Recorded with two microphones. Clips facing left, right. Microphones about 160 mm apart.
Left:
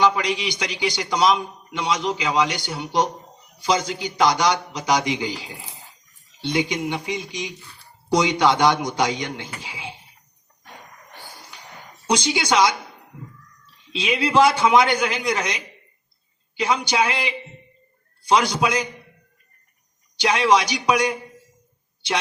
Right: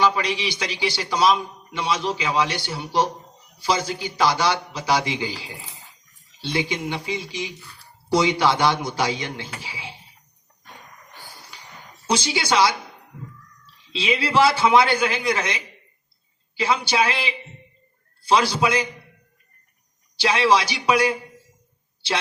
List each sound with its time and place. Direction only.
0.2 s a man's voice: 15° left (ahead or behind)
12.0 s a man's voice: 15° left (ahead or behind)
13.9 s a man's voice: 15° left (ahead or behind)
20.1 s a man's voice: 15° left (ahead or behind)